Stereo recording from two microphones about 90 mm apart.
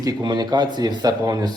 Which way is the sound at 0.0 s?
45° right (ahead or behind).